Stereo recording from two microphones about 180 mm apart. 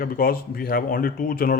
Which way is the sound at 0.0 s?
55° left (ahead or behind).